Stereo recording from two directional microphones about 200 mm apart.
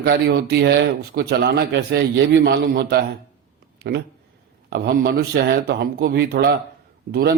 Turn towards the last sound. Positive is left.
turn(degrees=-50)  # may be behind; listen again after turning